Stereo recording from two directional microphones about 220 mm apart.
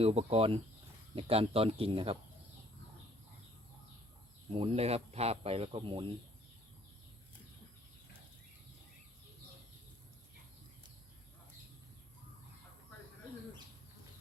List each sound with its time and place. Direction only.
0.0 s speech: 30° right (ahead or behind)
4.5 s speech: 25° right (ahead or behind)